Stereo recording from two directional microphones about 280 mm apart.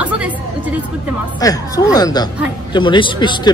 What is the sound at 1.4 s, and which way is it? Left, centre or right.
A man's voice, centre.